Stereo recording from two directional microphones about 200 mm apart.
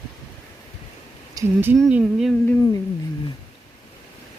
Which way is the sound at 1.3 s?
10° right (ahead or behind).